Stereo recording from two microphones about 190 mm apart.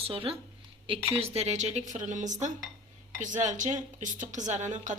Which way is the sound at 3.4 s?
40° right (ahead or behind).